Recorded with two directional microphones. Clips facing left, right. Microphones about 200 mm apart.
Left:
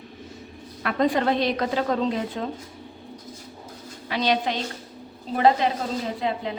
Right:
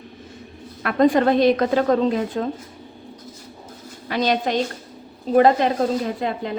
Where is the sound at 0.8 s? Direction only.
50° right (ahead or behind).